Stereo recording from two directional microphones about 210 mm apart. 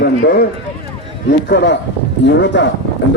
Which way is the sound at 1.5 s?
55° left (ahead or behind).